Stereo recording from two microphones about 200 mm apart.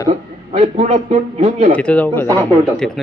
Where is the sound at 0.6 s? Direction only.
35° right (ahead or behind).